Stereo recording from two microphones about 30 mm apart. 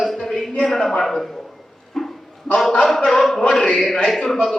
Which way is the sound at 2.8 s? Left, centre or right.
Centre.